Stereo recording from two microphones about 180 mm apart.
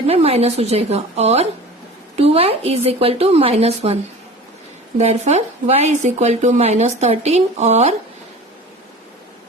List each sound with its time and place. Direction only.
0.1 s speech: 35° right (ahead or behind)
4.9 s speech: 35° right (ahead or behind)